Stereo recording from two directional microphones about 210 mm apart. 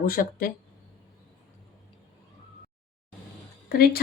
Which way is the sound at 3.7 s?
45° left (ahead or behind).